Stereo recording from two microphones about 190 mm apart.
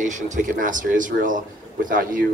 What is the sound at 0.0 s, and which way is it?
A man's voice, 40° right (ahead or behind).